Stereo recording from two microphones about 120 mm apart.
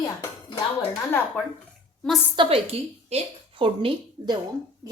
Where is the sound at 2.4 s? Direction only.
55° right (ahead or behind).